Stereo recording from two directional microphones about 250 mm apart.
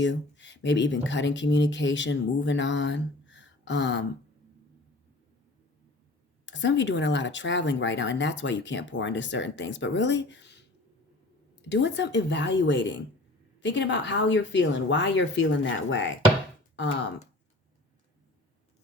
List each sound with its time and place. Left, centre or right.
0.0 s speech: left
6.4 s speech: left